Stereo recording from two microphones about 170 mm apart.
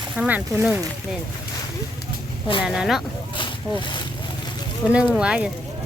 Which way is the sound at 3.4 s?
25° left (ahead or behind).